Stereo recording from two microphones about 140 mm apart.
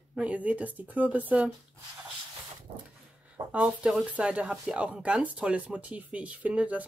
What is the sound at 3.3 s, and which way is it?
Speech, 10° right (ahead or behind).